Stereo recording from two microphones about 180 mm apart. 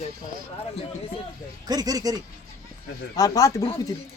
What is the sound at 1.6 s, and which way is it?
Speech, 20° right (ahead or behind).